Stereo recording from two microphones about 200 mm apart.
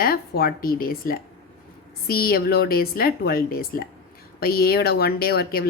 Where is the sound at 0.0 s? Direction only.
50° left (ahead or behind).